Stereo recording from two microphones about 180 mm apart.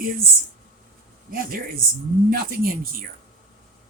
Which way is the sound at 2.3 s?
55° right (ahead or behind).